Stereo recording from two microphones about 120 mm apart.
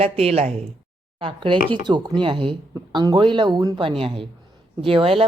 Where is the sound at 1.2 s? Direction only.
40° right (ahead or behind).